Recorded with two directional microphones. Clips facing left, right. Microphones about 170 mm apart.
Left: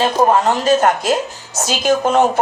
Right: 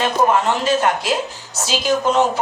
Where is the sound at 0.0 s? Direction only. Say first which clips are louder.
Left 3 dB; 40° left (ahead or behind).